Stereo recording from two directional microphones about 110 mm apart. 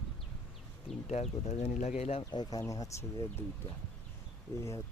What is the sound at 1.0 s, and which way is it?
Speech, 90° left.